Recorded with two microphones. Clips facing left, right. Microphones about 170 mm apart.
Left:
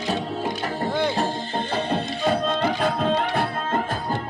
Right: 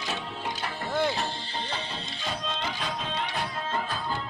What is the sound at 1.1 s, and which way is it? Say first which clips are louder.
Music: left 8 dB; 50° left (ahead or behind).